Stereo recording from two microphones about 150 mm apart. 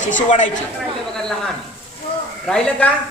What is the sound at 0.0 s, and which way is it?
Speech, 55° left (ahead or behind).